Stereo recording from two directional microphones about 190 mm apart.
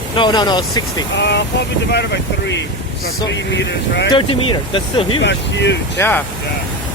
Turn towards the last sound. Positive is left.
turn(degrees=10)  # may be behind; listen again after turning